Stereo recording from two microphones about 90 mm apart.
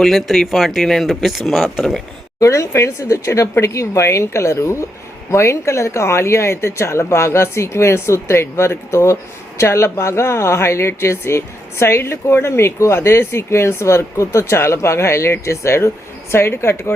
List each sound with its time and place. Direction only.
0.0 s speech: 5° left (ahead or behind)
2.4 s a woman's voice: 35° left (ahead or behind)